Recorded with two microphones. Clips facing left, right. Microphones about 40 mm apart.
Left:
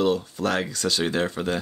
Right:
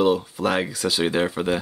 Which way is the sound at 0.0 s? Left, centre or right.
Centre.